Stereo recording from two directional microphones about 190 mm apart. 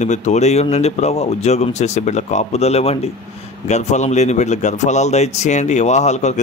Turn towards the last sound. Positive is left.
turn(degrees=35)  # may be behind; listen again after turning